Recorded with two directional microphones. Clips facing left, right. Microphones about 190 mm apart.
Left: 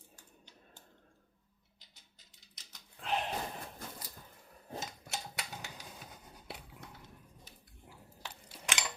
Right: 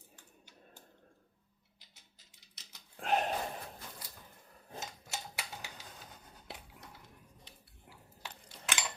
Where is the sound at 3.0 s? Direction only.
45° right (ahead or behind).